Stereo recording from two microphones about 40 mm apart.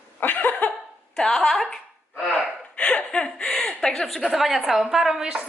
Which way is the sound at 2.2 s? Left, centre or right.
Left.